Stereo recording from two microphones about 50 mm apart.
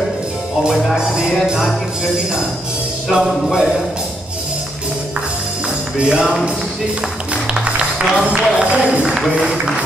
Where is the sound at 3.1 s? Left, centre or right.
Centre.